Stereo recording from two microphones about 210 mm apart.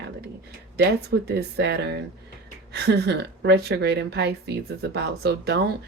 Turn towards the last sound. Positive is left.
turn(degrees=-50)  # may be behind; listen again after turning